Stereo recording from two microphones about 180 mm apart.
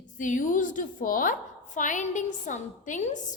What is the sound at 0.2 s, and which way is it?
A woman's voice, 45° left (ahead or behind).